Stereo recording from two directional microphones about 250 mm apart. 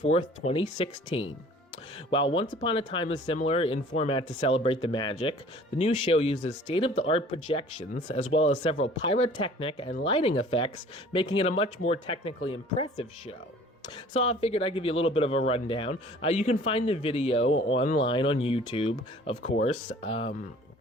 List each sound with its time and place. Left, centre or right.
0.0 s speech: left
17.4 s speech: left
18.0 s speech: left